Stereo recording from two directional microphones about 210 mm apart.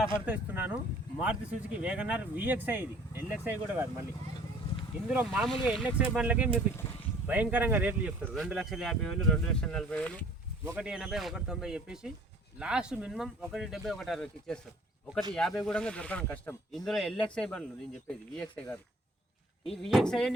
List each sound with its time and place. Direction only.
0.3 s speech: 10° right (ahead or behind)
5.0 s speech: 5° right (ahead or behind)